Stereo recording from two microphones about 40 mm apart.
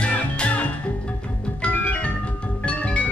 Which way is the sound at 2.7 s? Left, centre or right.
Left.